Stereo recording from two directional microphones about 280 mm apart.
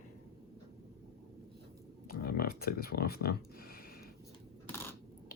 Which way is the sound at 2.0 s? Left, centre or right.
Left.